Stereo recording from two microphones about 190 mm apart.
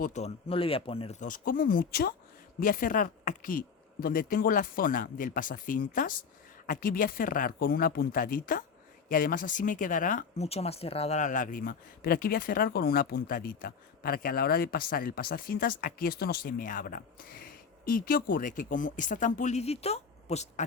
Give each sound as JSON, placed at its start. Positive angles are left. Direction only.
{"t": 0.0, "sound": "speech", "side_deg": 35}
{"t": 1.3, "sound": "speech", "side_deg": 45}